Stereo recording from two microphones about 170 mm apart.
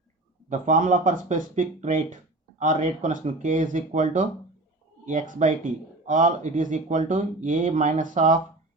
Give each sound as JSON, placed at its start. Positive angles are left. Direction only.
{"t": 0.5, "sound": "speech", "side_deg": -50}